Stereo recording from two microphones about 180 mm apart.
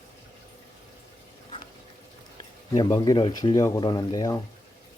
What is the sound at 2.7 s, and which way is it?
Speech, 20° left (ahead or behind).